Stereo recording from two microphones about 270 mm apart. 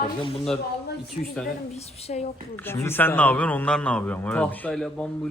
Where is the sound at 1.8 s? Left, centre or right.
Left.